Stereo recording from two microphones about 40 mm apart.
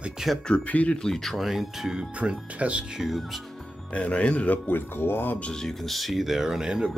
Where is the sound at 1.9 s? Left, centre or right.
Right.